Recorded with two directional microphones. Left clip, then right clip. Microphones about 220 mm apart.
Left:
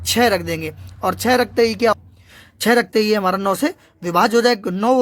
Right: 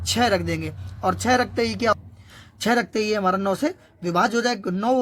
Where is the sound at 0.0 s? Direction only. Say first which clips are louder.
Left 4 dB; 30° left (ahead or behind).